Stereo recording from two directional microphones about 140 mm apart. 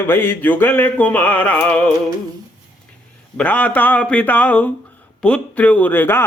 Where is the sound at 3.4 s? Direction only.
10° left (ahead or behind).